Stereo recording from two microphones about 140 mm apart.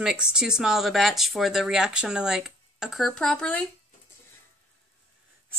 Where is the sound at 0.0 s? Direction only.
5° right (ahead or behind).